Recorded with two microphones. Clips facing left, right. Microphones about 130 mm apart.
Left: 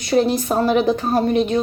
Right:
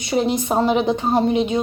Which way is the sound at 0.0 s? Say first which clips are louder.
Left 2 dB; 20° right (ahead or behind).